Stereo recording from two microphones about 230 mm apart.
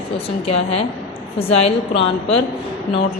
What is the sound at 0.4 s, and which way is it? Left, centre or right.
Speech, left.